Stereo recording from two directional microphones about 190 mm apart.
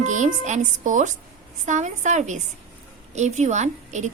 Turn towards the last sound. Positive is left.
turn(degrees=-40)  # may be behind; listen again after turning